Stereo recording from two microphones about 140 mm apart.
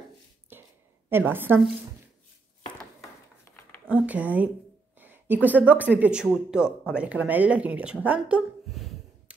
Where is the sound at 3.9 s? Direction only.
10° right (ahead or behind).